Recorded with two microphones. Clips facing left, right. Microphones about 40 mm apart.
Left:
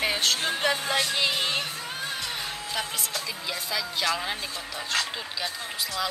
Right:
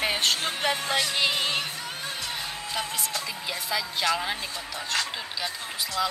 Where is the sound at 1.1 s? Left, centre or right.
Centre.